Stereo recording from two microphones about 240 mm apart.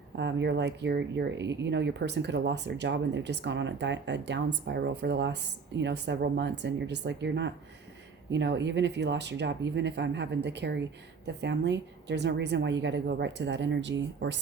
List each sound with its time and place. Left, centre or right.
0.2 s speech: right